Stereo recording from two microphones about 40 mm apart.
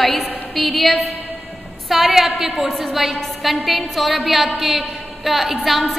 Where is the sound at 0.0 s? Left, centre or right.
Centre.